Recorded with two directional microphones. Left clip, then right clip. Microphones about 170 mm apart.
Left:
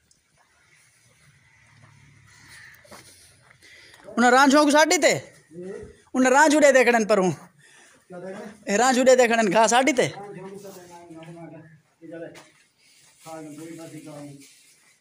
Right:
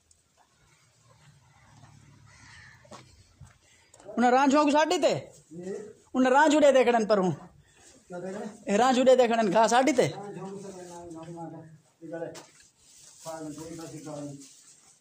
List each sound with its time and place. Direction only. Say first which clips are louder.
4.1 s a woman's voice: left 6 dB; 20° left (ahead or behind)
8.6 s speech: left 3 dB; 10° left (ahead or behind)